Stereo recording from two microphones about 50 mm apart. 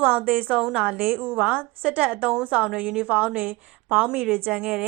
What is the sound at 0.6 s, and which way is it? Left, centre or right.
Speech, centre.